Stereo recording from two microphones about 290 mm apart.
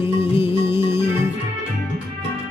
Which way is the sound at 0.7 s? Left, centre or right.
Centre.